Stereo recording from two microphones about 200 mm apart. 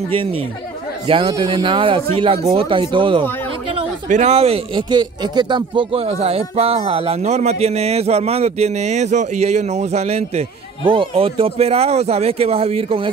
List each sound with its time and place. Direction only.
1.0 s a man's voice: 25° right (ahead or behind)